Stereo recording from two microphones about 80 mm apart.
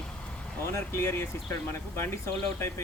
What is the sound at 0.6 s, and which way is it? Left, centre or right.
Speech, left.